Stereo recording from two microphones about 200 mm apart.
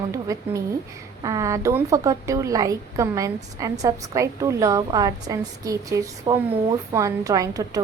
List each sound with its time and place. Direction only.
0.1 s a woman's voice: 15° right (ahead or behind)